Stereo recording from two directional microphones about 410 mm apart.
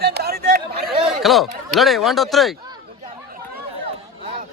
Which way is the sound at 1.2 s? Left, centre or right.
Centre.